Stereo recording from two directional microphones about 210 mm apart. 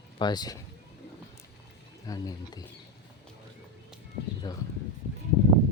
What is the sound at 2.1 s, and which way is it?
Speech, 15° left (ahead or behind).